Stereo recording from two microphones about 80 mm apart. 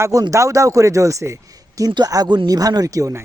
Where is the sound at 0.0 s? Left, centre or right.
Right.